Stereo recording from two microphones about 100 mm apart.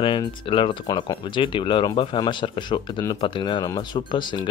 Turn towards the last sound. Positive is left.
turn(degrees=50)  # may be behind; listen again after turning